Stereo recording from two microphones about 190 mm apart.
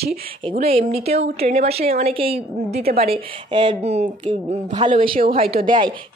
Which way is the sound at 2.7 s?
55° right (ahead or behind).